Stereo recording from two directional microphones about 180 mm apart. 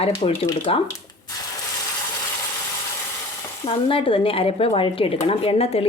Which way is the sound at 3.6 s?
30° left (ahead or behind).